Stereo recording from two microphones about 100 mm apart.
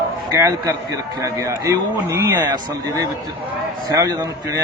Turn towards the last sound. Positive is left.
turn(degrees=-35)  # may be behind; listen again after turning